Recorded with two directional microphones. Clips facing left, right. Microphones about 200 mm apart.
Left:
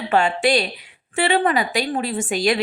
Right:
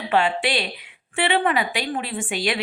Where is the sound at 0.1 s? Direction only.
45° left (ahead or behind).